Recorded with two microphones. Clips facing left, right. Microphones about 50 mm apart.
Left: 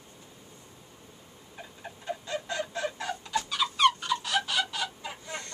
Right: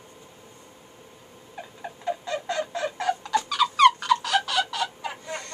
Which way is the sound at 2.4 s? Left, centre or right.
Right.